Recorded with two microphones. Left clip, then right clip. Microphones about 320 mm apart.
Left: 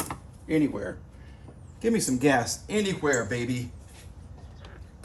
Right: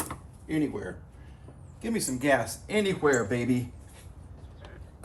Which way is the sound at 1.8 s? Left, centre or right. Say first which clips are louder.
Left 3 dB; left.